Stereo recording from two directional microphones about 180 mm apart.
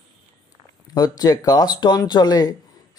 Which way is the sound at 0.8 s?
20° left (ahead or behind).